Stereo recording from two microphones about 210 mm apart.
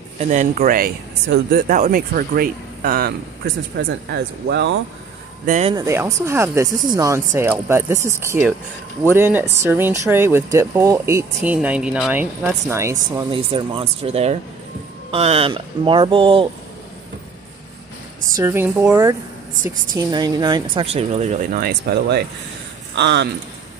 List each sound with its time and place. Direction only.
0.3 s speech: 35° right (ahead or behind); by 4.7 s 55° right (ahead or behind)
5.5 s speech: 30° right (ahead or behind)
5.8 s speech: 15° right (ahead or behind)
13.1 s speech: 25° right (ahead or behind)
18.3 s speech: 10° right (ahead or behind); by 23.2 s 55° right (ahead or behind)